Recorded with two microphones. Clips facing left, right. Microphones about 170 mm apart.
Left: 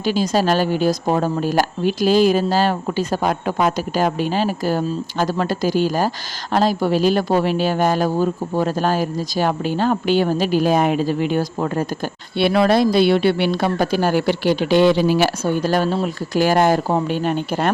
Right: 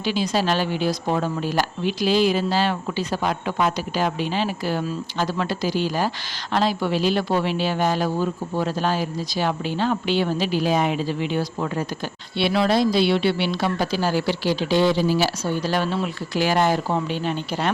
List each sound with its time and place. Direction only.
0.0 s speech: 45° left (ahead or behind)